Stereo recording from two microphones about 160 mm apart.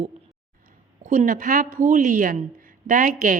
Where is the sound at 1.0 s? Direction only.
55° right (ahead or behind).